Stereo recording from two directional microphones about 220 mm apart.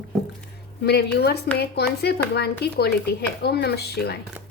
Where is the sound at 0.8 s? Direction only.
50° left (ahead or behind).